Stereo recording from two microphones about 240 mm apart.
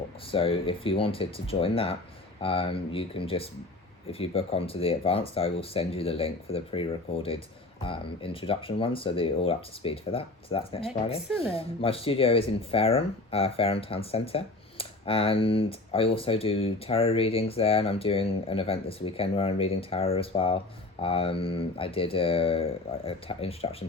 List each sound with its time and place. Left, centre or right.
0.3 s speech: left